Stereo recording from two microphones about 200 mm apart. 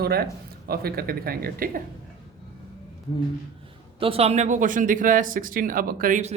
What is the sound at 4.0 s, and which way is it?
Speech, 30° right (ahead or behind).